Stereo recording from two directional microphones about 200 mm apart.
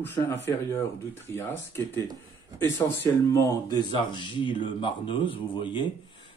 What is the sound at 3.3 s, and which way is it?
Speech, 20° left (ahead or behind).